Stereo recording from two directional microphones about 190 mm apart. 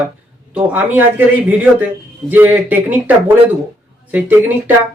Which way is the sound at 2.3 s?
10° right (ahead or behind).